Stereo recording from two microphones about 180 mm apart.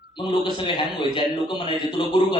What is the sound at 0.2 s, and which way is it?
A man's voice, 25° left (ahead or behind).